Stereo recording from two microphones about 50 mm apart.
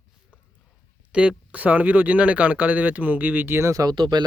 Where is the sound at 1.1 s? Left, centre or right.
Centre.